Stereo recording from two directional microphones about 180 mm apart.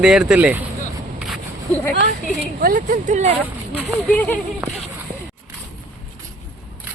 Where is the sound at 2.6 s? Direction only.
50° right (ahead or behind).